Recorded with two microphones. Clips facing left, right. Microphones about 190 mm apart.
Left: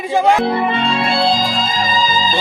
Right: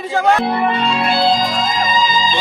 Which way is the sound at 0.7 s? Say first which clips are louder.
Even; centre (ahead or behind).